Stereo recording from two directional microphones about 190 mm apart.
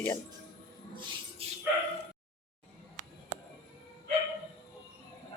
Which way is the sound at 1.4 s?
30° right (ahead or behind).